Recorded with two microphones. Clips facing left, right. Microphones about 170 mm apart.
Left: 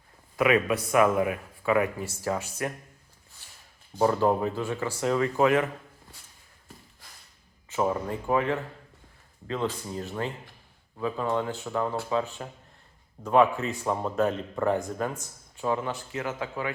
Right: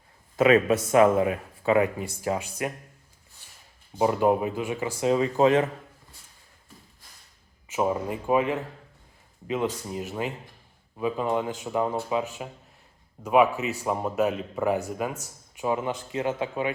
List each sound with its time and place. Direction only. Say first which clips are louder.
0.3 s speech: right 4 dB; 25° right (ahead or behind)
3.9 s speech: right 1 dB; 15° right (ahead or behind)
7.7 s speech: right 1 dB; 15° right (ahead or behind)